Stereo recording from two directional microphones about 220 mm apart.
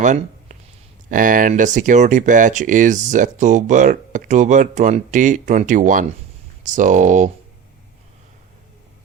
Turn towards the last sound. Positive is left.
turn(degrees=-35)  # may be behind; listen again after turning